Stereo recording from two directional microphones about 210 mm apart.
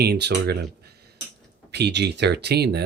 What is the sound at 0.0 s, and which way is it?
Speech, 50° right (ahead or behind).